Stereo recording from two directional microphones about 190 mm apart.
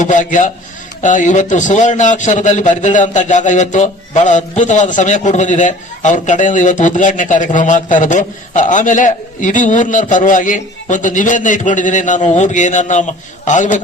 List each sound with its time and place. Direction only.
0.0 s a man's voice: 40° left (ahead or behind)